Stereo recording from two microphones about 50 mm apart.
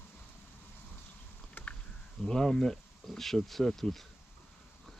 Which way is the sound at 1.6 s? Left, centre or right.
Left.